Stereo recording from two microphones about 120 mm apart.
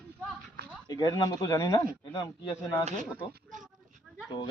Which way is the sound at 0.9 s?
35° left (ahead or behind).